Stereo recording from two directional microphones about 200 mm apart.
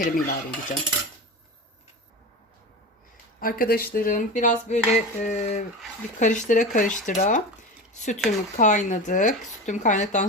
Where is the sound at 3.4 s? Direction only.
45° left (ahead or behind).